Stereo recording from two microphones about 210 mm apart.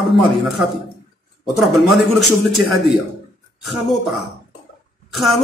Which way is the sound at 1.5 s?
Centre (ahead or behind).